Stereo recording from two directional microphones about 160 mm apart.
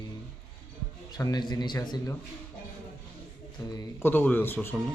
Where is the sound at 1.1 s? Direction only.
25° left (ahead or behind).